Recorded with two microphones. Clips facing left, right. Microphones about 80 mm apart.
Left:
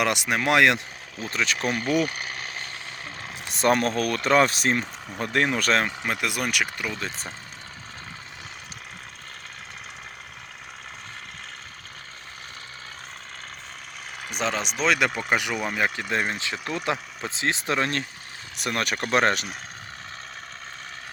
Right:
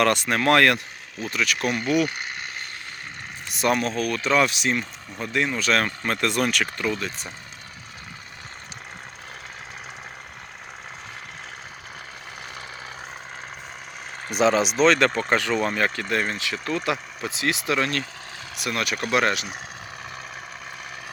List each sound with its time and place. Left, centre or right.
0.0 s speech: centre
1.3 s speech: left
3.5 s speech: left
5.7 s speech: centre
7.0 s speech: left
14.3 s speech: centre
14.8 s speech: centre
16.0 s speech: left